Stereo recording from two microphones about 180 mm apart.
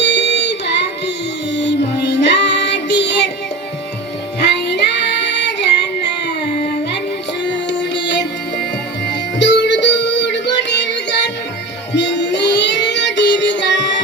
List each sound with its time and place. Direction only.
0.0 s music: 75° left (ahead or behind)
1.5 s child singing: 75° left (ahead or behind)
4.4 s child singing: 70° left (ahead or behind)
7.4 s music: 75° left (ahead or behind)
11.9 s child singing: 75° left (ahead or behind)